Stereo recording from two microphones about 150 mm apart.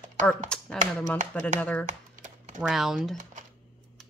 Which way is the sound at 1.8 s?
55° right (ahead or behind).